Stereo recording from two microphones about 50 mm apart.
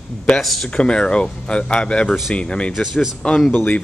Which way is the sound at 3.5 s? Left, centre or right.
Left.